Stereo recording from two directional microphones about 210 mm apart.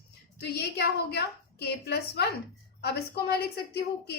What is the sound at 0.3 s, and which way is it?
A woman's voice, 50° left (ahead or behind).